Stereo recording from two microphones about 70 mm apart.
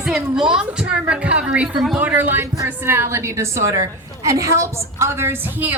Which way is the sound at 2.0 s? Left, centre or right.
Right.